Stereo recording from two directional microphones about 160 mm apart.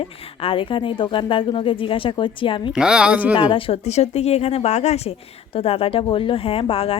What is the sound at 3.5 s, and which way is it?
Speech, 35° left (ahead or behind).